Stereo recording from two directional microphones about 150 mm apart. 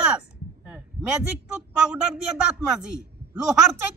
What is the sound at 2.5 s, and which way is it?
Speech, 5° right (ahead or behind).